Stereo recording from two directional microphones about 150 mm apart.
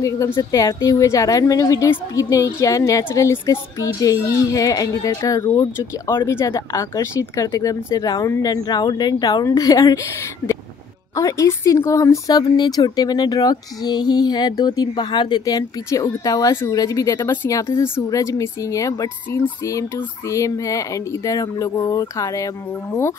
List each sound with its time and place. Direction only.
0.4 s speech: 25° left (ahead or behind)
11.1 s speech: 20° left (ahead or behind)